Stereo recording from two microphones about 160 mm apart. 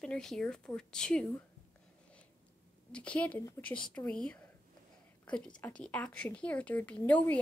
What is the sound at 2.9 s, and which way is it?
Speech, 10° left (ahead or behind).